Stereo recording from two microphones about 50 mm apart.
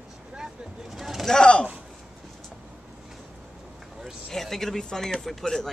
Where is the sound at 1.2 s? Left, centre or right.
Centre.